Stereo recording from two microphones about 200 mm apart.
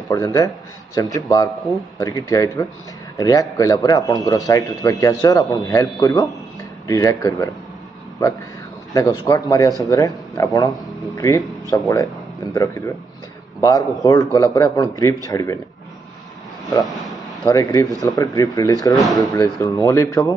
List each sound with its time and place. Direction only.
0.1 s a man's voice: 15° left (ahead or behind)
8.9 s a man's voice: 20° left (ahead or behind)
16.8 s speech: centre (ahead or behind)
17.5 s a man's voice: 15° left (ahead or behind)